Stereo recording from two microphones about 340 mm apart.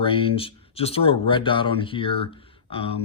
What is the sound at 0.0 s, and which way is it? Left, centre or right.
Speech, centre.